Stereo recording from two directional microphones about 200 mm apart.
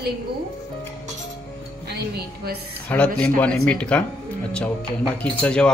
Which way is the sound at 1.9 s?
55° right (ahead or behind).